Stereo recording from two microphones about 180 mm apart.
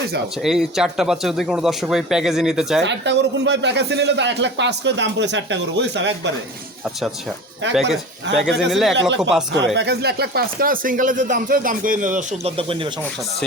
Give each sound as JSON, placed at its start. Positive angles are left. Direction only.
{"t": 0.4, "sound": "speech", "side_deg": 0}
{"t": 2.8, "sound": "speech", "side_deg": -80}
{"t": 7.7, "sound": "speech", "side_deg": 0}
{"t": 8.3, "sound": "speech", "side_deg": -75}
{"t": 8.7, "sound": "speech", "side_deg": 0}
{"t": 9.0, "sound": "speech", "side_deg": -85}
{"t": 9.7, "sound": "speech", "side_deg": -65}
{"t": 12.5, "sound": "speech", "side_deg": -30}